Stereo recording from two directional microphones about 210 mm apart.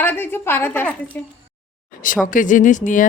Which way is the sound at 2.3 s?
40° left (ahead or behind).